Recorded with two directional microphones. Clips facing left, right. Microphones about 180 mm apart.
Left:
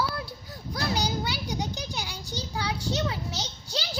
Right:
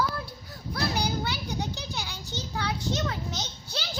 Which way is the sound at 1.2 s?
15° left (ahead or behind).